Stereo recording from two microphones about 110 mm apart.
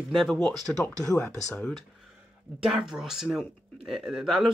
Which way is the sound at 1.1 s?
15° left (ahead or behind).